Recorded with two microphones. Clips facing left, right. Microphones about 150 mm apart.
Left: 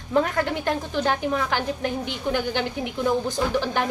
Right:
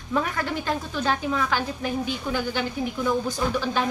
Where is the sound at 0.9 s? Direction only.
20° left (ahead or behind).